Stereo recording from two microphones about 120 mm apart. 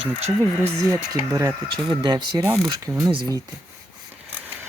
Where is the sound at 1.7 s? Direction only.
40° right (ahead or behind).